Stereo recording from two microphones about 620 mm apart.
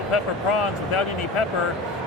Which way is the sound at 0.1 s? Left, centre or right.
Left.